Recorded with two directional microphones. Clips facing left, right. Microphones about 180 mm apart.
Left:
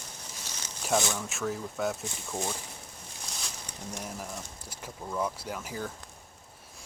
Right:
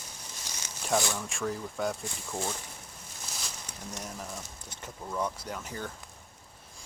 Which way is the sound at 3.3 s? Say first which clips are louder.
Even; 5° right (ahead or behind).